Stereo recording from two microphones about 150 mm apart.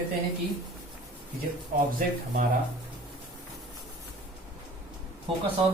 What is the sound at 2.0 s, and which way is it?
Speech, 70° right (ahead or behind).